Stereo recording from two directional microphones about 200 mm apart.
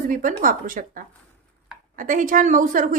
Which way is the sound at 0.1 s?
40° right (ahead or behind).